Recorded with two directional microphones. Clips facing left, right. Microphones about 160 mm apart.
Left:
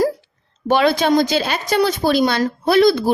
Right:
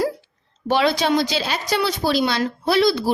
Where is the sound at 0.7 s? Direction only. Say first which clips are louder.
Left 3 dB; 50° left (ahead or behind).